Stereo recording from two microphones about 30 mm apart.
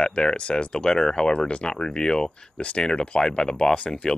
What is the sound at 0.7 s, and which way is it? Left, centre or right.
Speech, centre.